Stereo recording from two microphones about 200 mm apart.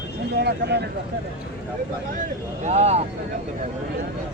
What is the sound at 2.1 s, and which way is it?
Speech, 40° right (ahead or behind).